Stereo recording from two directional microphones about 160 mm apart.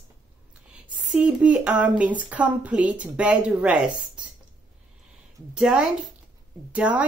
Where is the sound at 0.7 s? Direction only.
5° right (ahead or behind).